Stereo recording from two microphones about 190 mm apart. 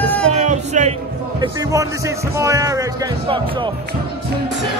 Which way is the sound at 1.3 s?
20° right (ahead or behind).